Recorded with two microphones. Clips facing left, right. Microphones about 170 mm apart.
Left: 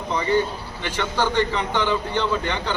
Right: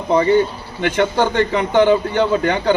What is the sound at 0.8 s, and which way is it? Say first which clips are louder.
A man's voice: right 8 dB; 55° right (ahead or behind).